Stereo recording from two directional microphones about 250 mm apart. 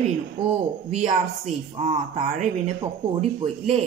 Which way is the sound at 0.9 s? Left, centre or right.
Right.